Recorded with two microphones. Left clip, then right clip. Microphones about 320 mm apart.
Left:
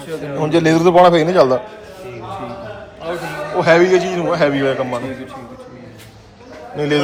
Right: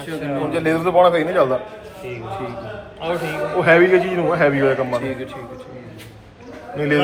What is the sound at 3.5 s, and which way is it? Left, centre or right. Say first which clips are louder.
A man's voice: left 2 dB; centre.